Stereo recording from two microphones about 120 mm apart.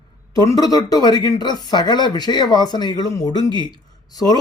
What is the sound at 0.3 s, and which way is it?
Speech, 30° left (ahead or behind).